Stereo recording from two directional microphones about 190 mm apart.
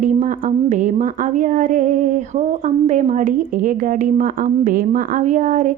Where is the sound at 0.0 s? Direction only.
40° right (ahead or behind).